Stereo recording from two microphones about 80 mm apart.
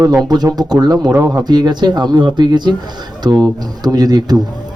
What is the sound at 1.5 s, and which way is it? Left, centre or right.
Speech, right.